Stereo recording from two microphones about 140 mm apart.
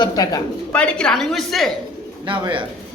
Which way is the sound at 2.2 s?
35° right (ahead or behind).